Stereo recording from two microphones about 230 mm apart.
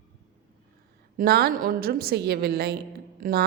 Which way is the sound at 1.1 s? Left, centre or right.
Right.